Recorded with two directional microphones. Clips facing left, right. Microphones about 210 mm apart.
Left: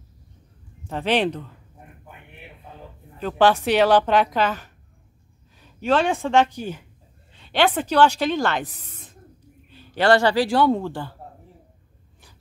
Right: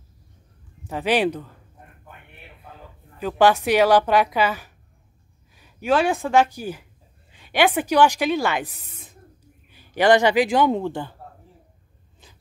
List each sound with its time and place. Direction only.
0.8 s speech: 10° right (ahead or behind)
2.6 s a woman's voice: 5° right (ahead or behind)